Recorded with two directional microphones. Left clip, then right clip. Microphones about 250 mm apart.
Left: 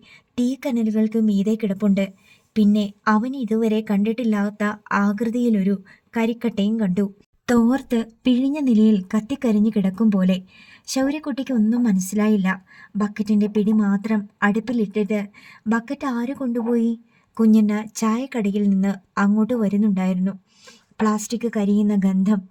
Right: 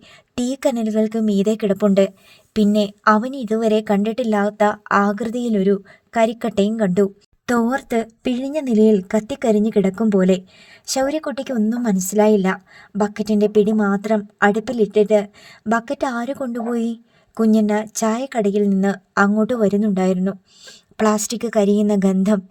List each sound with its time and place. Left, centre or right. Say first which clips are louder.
0.6 s a woman's voice: right 9 dB; right
7.5 s speech: right 1 dB; centre
8.4 s a woman's voice: right 5 dB; right